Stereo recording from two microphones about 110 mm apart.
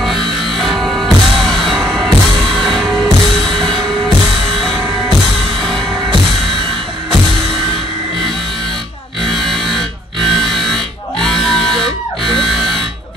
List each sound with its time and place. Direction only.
0.0 s music: centre (ahead or behind)
9.2 s music: centre (ahead or behind)